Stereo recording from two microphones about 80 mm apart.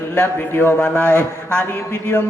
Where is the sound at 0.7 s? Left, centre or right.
Centre.